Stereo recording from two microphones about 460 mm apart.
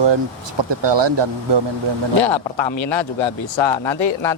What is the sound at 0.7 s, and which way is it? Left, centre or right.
Speech, right.